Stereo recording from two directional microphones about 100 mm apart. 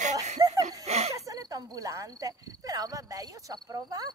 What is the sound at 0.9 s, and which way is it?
Speech, 90° right.